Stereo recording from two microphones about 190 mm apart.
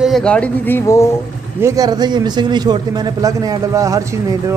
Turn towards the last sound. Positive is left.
turn(degrees=-15)  # may be behind; listen again after turning